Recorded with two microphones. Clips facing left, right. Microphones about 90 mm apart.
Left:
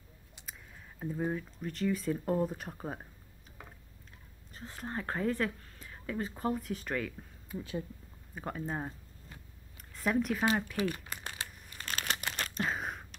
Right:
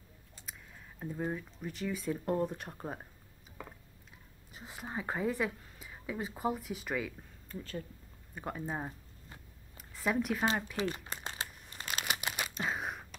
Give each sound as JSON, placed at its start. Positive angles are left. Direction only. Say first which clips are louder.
{"t": 0.5, "sound": "speech", "louder": "left 1 dB", "side_deg": 0}
{"t": 4.5, "sound": "a woman's voice", "louder": "left 2 dB", "side_deg": -10}
{"t": 7.4, "sound": "speech", "louder": "left 3 dB", "side_deg": 15}
{"t": 8.4, "sound": "speech", "louder": "left 1 dB", "side_deg": 0}
{"t": 9.8, "sound": "a sound", "louder": "left 2 dB", "side_deg": 0}
{"t": 11.1, "sound": "shuffling cards", "louder": "right 1 dB", "side_deg": -25}
{"t": 11.8, "sound": "crumpling", "louder": "even", "side_deg": -15}